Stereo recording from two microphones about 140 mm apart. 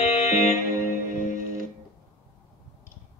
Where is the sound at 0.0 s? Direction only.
50° left (ahead or behind).